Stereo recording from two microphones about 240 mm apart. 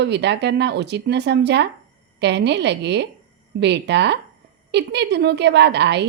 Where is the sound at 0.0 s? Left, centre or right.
Right.